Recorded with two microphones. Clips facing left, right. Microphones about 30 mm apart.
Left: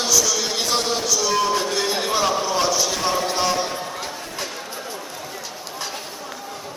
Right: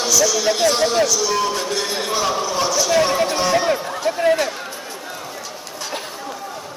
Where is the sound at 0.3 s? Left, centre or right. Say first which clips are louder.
Right 5 dB; centre.